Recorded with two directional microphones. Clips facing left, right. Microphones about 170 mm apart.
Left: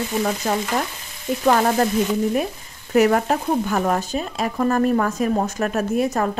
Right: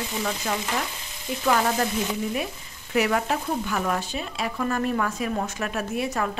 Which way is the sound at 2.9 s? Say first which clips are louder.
Left 7 dB; 45° left (ahead or behind).